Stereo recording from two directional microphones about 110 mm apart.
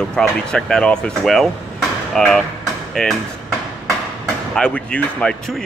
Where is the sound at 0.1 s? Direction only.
5° left (ahead or behind).